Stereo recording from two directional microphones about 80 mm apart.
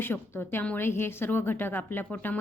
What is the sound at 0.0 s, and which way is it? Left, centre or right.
A woman's voice, left.